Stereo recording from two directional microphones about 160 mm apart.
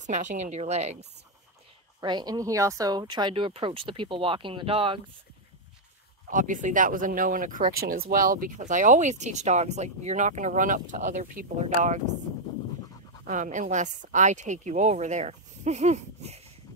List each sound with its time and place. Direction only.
0.0 s speech: 50° right (ahead or behind)
2.0 s speech: 25° right (ahead or behind)
6.2 s speech: 55° right (ahead or behind)
13.3 s speech: 50° right (ahead or behind)